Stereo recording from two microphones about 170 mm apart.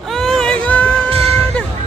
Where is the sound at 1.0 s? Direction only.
35° right (ahead or behind).